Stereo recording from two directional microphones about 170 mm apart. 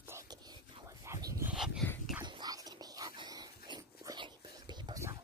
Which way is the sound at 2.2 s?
25° right (ahead or behind).